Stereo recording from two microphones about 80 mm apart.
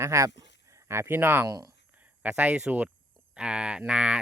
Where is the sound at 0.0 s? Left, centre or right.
Right.